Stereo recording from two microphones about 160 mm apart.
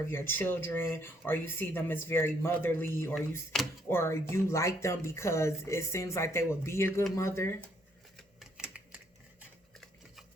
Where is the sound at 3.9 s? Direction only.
15° left (ahead or behind).